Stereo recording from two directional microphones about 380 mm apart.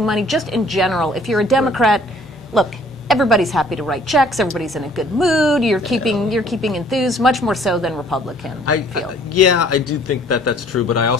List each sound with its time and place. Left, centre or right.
0.0 s a woman's voice: centre
8.7 s speech: left